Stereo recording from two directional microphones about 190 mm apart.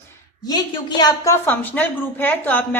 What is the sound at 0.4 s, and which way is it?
Speech, 20° left (ahead or behind).